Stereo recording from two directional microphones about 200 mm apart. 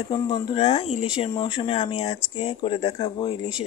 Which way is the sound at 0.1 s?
25° left (ahead or behind).